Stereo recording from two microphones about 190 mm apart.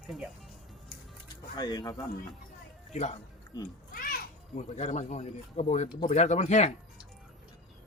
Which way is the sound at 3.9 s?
50° left (ahead or behind).